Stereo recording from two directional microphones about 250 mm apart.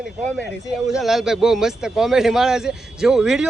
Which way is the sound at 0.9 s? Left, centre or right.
Centre.